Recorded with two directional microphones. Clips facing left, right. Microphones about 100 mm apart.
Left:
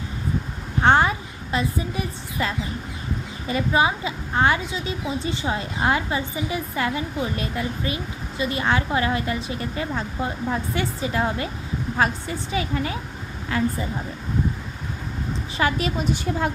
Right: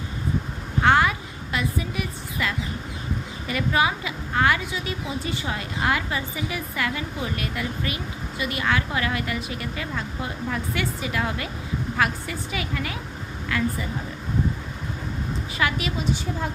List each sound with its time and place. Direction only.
0.8 s a sound: 30° left (ahead or behind)
3.4 s a woman's voice: 25° left (ahead or behind)
15.5 s a woman's voice: 35° left (ahead or behind)
16.0 s a woman's voice: 65° left (ahead or behind)